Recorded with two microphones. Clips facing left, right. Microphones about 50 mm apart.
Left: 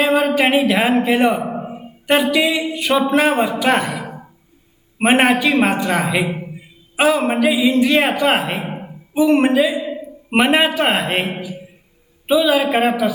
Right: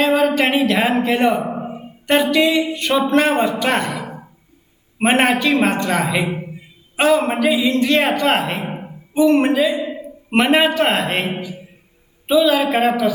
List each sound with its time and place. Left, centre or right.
0.0 s speech: centre
1.5 s a sound: centre
3.1 s a man's voice: centre